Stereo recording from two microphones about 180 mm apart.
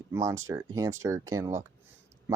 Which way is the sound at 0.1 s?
15° right (ahead or behind).